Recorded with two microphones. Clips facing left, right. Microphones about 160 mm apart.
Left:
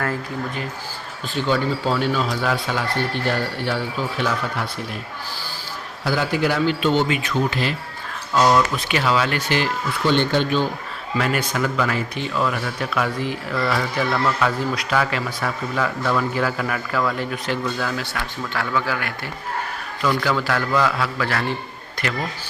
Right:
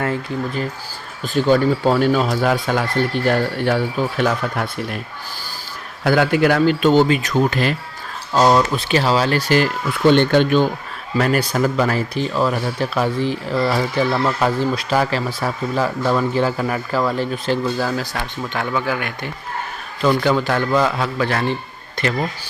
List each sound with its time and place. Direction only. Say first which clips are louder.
1.3 s a man's voice: right 6 dB; 45° right (ahead or behind)
6.1 s a man's voice: right 6 dB; 60° right (ahead or behind); by 7.7 s 45° right (ahead or behind)
8.3 s a man's voice: right 3 dB; 30° right (ahead or behind)
10.1 s speech: right 6 dB; 55° right (ahead or behind)
11.2 s a man's voice: right 5 dB; 35° right (ahead or behind)
18.2 s a man's voice: right 2 dB; 20° right (ahead or behind)